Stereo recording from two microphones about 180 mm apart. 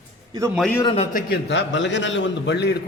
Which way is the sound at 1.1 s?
70° left (ahead or behind).